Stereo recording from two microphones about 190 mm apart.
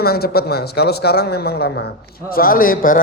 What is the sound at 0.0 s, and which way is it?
A man's voice, 55° left (ahead or behind).